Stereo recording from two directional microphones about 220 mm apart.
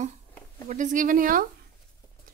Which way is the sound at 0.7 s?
35° right (ahead or behind).